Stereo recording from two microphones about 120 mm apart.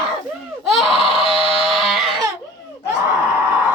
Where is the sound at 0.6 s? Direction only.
Centre (ahead or behind).